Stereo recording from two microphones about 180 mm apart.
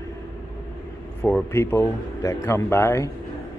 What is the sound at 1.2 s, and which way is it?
A man's voice, 10° left (ahead or behind).